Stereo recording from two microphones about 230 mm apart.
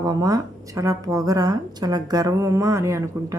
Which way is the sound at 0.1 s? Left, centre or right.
Centre.